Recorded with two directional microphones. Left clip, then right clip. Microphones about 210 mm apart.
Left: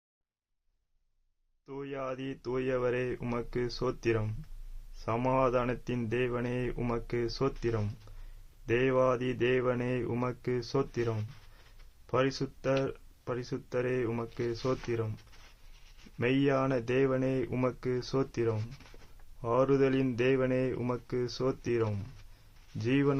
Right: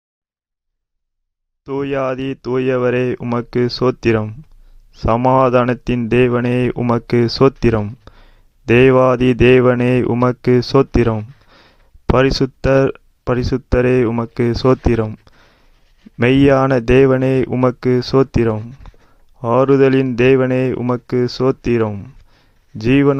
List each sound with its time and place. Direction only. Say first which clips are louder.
1.6 s speech: right 19 dB; 45° right (ahead or behind)
16.1 s speech: right 17 dB; 45° right (ahead or behind)